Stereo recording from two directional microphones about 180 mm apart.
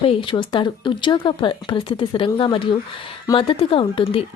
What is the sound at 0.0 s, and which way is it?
A woman's voice, 30° left (ahead or behind).